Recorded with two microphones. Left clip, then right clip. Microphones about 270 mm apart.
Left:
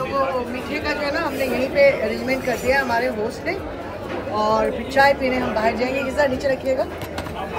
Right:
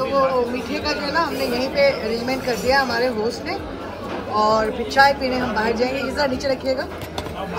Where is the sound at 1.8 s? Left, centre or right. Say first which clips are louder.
Left 3 dB; right.